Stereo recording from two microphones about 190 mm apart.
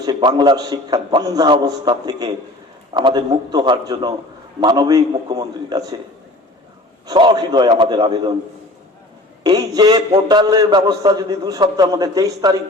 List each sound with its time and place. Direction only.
0.0 s a man's voice: 25° right (ahead or behind)
7.1 s a man's voice: 25° right (ahead or behind)
9.4 s a man's voice: 20° right (ahead or behind)